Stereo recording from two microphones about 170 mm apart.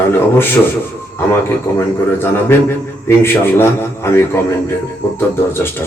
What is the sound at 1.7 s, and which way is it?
Speech, 15° left (ahead or behind).